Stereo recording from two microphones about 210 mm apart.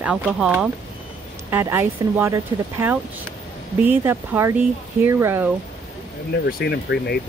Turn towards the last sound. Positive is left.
turn(degrees=50)  # may be behind; listen again after turning